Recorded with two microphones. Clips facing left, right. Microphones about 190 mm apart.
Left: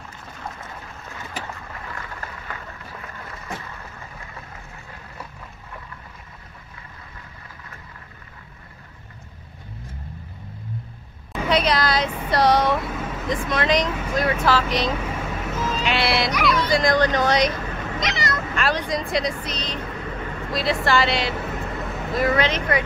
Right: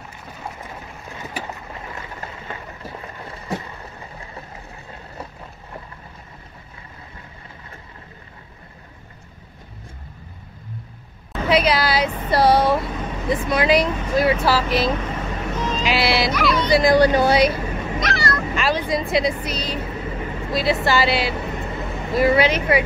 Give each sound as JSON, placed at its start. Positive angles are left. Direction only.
{"t": 1.1, "sound": "boat", "side_deg": -20}
{"t": 11.4, "sound": "a sound", "side_deg": -5}
{"t": 12.3, "sound": "vehicle", "side_deg": -5}
{"t": 13.3, "sound": "speech", "side_deg": -5}
{"t": 15.0, "sound": "vehicle", "side_deg": 10}
{"t": 16.6, "sound": "speech", "side_deg": -10}
{"t": 18.0, "sound": "a sound", "side_deg": 20}
{"t": 18.5, "sound": "vehicle", "side_deg": -5}
{"t": 22.3, "sound": "speech", "side_deg": -10}